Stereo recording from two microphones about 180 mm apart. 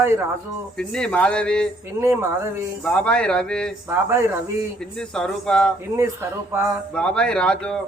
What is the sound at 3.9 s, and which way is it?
Speech, 15° right (ahead or behind).